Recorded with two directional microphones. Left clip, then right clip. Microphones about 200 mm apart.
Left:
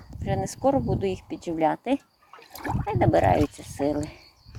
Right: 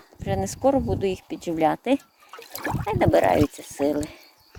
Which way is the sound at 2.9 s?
25° right (ahead or behind).